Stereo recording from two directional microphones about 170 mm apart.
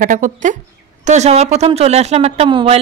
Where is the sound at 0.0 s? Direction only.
50° right (ahead or behind).